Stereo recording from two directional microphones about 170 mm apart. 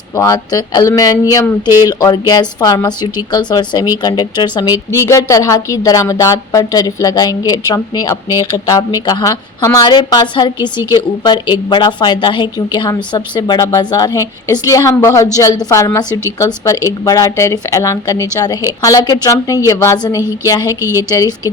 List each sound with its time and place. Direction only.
0.2 s a woman's voice: 20° left (ahead or behind)